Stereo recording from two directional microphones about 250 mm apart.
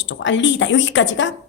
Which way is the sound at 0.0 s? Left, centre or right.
Left.